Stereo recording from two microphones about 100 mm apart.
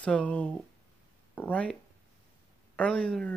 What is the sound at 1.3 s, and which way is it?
Speech, 15° left (ahead or behind).